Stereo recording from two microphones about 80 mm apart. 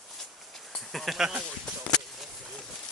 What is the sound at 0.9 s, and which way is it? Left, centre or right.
Sheep, centre.